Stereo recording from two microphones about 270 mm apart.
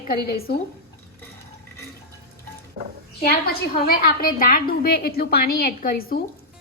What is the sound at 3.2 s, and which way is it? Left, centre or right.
A woman's voice, left.